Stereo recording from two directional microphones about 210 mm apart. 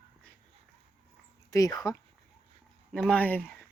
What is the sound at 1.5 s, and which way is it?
Speech, 15° left (ahead or behind).